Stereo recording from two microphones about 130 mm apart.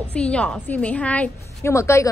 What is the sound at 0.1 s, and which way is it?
A woman's voice, 10° left (ahead or behind).